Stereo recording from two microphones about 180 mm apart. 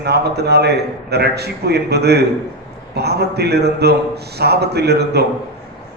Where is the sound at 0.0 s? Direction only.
65° right (ahead or behind).